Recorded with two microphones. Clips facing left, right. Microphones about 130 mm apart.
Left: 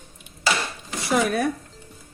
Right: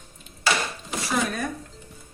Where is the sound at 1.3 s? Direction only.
70° left (ahead or behind).